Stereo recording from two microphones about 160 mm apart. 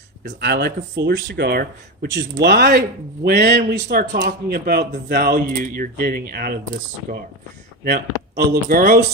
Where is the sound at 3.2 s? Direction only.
80° right.